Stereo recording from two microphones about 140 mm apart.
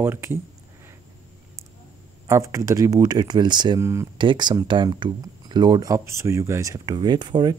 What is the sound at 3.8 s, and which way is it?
Speech, 20° right (ahead or behind).